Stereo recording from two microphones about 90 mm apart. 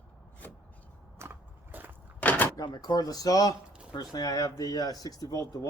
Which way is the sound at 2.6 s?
50° left (ahead or behind).